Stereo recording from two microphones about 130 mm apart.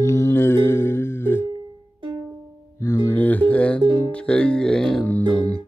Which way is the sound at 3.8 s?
40° right (ahead or behind).